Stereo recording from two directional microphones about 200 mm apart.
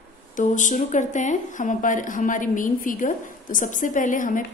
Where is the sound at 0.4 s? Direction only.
40° left (ahead or behind).